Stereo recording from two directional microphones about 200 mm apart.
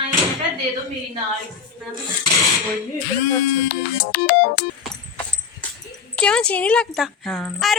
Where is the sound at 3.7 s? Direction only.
50° left (ahead or behind).